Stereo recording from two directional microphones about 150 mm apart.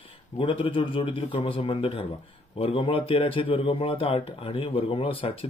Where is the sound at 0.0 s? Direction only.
35° left (ahead or behind).